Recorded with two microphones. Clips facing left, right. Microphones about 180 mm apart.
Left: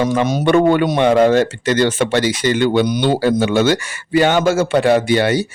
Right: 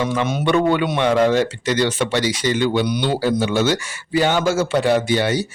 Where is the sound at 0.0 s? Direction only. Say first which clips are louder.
Left 4 dB; 40° left (ahead or behind).